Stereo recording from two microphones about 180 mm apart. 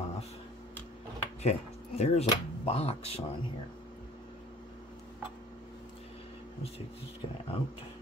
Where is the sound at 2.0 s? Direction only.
35° left (ahead or behind).